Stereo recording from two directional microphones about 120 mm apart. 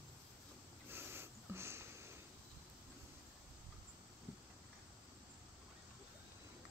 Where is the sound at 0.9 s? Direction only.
20° right (ahead or behind).